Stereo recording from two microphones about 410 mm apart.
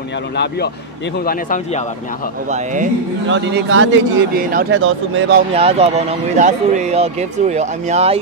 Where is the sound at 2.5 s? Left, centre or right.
Centre.